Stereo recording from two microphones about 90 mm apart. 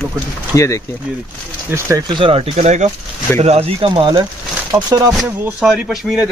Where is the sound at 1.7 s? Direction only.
35° right (ahead or behind).